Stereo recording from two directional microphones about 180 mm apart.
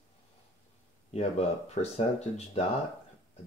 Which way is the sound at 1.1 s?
35° left (ahead or behind).